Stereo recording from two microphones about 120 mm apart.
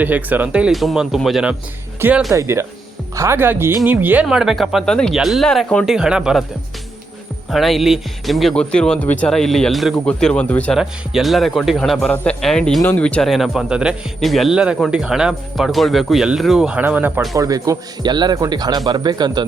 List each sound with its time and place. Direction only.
0.0 s speech: 15° right (ahead or behind)
7.5 s speech: centre (ahead or behind)
10.8 s a man's voice: centre (ahead or behind)
13.2 s speech: centre (ahead or behind)
17.3 s speech: 30° right (ahead or behind)